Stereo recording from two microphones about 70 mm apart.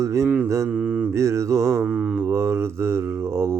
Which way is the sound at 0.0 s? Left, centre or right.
Right.